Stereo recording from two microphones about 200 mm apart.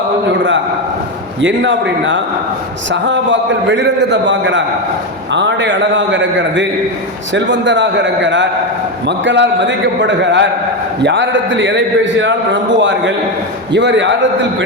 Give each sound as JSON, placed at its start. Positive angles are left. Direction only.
{"t": 1.4, "sound": "a man's voice", "side_deg": -70}